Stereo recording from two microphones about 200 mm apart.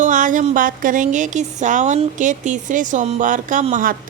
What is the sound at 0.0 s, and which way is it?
Speech, 40° right (ahead or behind).